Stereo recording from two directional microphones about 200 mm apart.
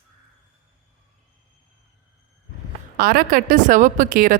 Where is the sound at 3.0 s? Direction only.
50° right (ahead or behind).